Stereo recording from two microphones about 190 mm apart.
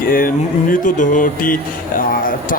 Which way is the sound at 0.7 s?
45° left (ahead or behind).